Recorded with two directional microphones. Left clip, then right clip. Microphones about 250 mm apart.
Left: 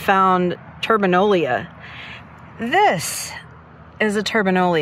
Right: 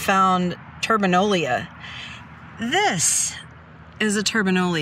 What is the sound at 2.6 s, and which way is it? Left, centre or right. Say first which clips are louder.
Speech: left 4 dB; centre.